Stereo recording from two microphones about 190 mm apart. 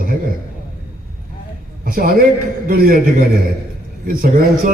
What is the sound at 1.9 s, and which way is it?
A man's voice, 50° right (ahead or behind).